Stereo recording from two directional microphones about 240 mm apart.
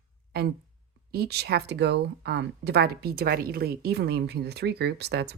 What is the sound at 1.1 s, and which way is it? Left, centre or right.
Speech, right.